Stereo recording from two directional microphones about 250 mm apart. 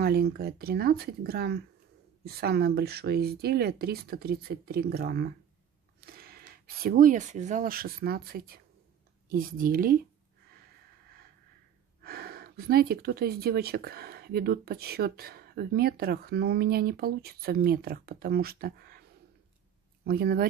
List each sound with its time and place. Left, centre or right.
0.0 s speech: right
12.0 s speech: right
20.1 s speech: right